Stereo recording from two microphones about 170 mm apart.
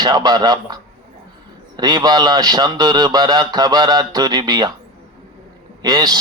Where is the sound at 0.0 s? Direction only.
25° right (ahead or behind).